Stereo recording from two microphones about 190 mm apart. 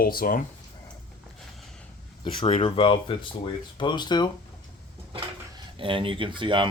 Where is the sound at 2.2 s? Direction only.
30° left (ahead or behind).